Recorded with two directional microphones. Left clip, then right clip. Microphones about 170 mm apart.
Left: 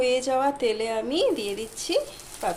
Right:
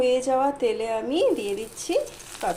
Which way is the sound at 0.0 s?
5° right (ahead or behind).